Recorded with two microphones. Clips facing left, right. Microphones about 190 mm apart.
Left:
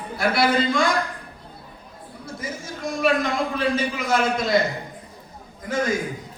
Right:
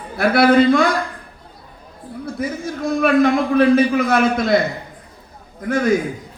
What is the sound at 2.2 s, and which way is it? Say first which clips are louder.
A man's voice: right 9 dB; 60° right (ahead or behind).